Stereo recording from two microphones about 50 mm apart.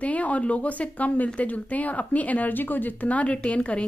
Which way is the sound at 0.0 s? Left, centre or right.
Left.